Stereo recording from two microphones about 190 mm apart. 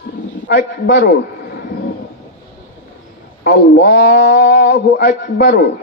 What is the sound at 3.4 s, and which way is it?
A man's voice, 60° left (ahead or behind).